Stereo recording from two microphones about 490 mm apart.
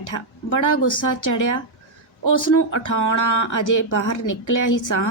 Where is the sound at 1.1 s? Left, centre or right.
Left.